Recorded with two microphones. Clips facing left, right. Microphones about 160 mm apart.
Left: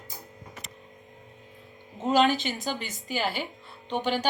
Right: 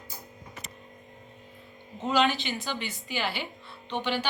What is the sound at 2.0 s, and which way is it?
A woman's voice, 40° left (ahead or behind).